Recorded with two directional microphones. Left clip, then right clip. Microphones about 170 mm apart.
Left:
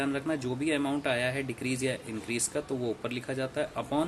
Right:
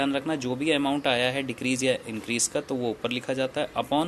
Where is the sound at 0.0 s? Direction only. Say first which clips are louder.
Right 4 dB; 25° right (ahead or behind).